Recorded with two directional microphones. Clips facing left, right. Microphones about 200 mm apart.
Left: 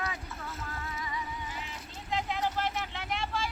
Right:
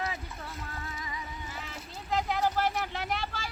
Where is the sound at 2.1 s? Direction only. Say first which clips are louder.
Right 3 dB; 40° right (ahead or behind).